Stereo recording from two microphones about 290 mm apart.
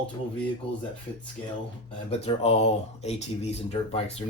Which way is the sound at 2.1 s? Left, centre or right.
Left.